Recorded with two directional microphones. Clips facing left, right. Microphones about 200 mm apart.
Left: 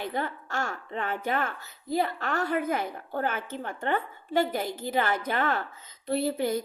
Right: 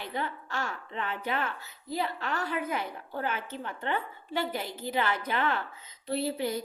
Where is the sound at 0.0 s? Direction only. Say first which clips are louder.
Left 3 dB; 45° left (ahead or behind).